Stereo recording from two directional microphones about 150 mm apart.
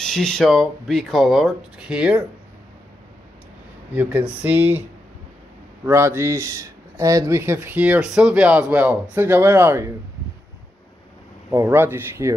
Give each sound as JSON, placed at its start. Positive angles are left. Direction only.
{"t": 0.0, "sound": "speech", "side_deg": 5}
{"t": 3.9, "sound": "speech", "side_deg": -10}
{"t": 5.9, "sound": "speech", "side_deg": -20}
{"t": 11.5, "sound": "speech", "side_deg": -15}